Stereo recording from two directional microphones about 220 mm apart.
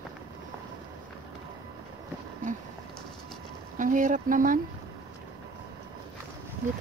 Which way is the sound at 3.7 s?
35° right (ahead or behind).